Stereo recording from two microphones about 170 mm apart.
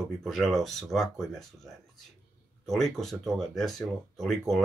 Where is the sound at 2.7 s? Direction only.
Centre (ahead or behind).